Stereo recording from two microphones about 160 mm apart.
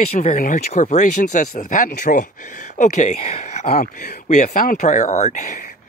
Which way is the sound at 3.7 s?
70° left (ahead or behind).